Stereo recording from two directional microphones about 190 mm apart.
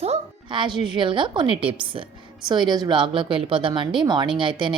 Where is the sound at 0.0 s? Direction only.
30° right (ahead or behind).